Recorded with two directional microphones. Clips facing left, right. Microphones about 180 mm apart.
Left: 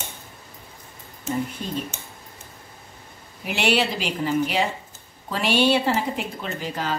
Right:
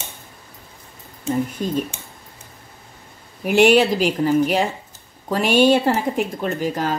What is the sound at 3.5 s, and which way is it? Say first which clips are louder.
Speech: right 9 dB; 50° right (ahead or behind).